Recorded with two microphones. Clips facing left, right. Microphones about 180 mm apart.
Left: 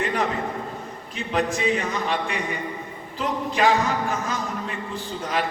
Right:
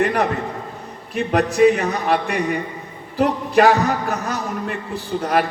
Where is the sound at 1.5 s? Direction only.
65° right (ahead or behind).